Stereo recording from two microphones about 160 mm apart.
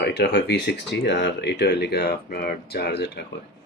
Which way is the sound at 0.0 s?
90° left.